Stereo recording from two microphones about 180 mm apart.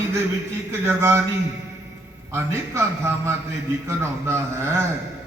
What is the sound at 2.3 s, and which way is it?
A man's voice, 15° right (ahead or behind).